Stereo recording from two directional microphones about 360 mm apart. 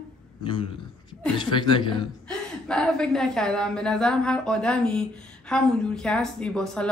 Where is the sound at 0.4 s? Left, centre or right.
Centre.